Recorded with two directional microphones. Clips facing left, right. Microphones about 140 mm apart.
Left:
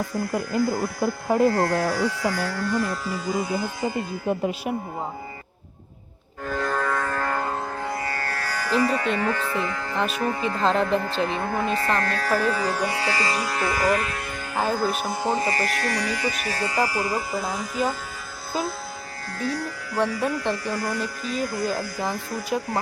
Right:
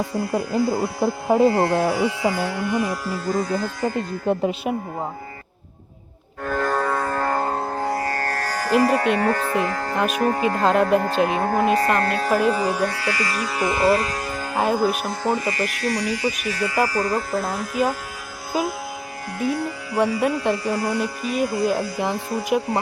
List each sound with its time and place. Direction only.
0.2 s speech: 30° right (ahead or behind); by 3.2 s 10° right (ahead or behind)
3.2 s speech: 5° left (ahead or behind)
4.3 s speech: 25° right (ahead or behind)
6.4 s music: 50° right (ahead or behind)
6.7 s music: 35° right (ahead or behind); by 12.7 s 20° right (ahead or behind)
12.9 s music: 25° left (ahead or behind)
13.6 s speech: 25° right (ahead or behind)
14.6 s speech: 20° right (ahead or behind)
15.2 s music: 25° left (ahead or behind)
15.8 s speech: 55° left (ahead or behind)
16.5 s speech: 30° left (ahead or behind)
16.8 s speech: 10° left (ahead or behind); by 22.4 s 25° right (ahead or behind)